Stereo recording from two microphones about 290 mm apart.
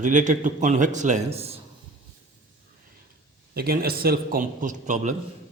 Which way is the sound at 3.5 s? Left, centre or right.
Right.